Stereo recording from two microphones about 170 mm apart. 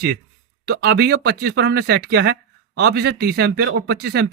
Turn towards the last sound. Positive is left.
turn(degrees=-75)  # may be behind; listen again after turning